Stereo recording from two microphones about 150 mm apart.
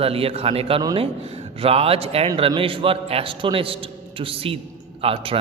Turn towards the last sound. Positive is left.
turn(degrees=-40)  # may be behind; listen again after turning